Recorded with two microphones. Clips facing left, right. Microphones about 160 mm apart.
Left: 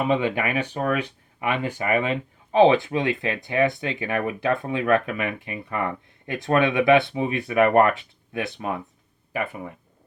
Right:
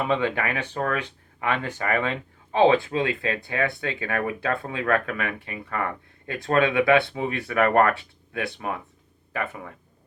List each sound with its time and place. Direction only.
0.0 s speech: 15° left (ahead or behind)